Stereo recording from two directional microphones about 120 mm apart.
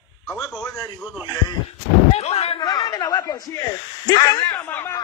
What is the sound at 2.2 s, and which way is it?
Speech, 60° left (ahead or behind).